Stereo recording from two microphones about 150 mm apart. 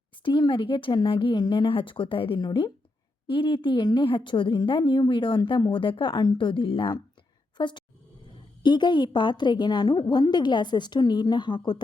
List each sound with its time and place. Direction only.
0.2 s a woman's voice: 30° left (ahead or behind)